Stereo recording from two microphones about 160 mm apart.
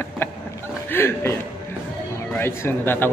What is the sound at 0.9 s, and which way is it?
A man's voice, 15° left (ahead or behind).